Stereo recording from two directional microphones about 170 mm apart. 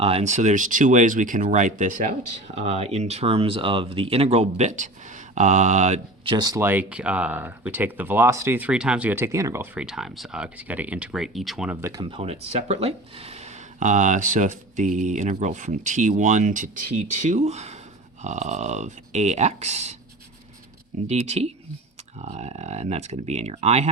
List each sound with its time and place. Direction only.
0.0 s speech: 40° right (ahead or behind)
2.6 s speech: 40° right (ahead or behind)
6.3 s speech: 20° right (ahead or behind)
6.7 s speech: 10° right (ahead or behind)
11.8 s speech: 20° right (ahead or behind)
12.1 s speech: 35° right (ahead or behind)
21.1 s speech: 40° right (ahead or behind)